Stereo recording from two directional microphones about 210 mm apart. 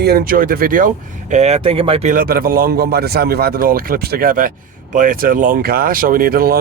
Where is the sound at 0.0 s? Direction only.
45° right (ahead or behind).